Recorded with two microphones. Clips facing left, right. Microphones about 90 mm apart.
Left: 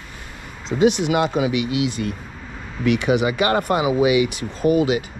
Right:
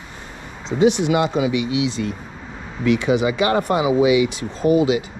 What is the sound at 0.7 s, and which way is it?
Speech, 5° right (ahead or behind).